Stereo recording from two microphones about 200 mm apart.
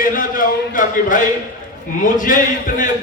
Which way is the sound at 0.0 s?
45° left (ahead or behind).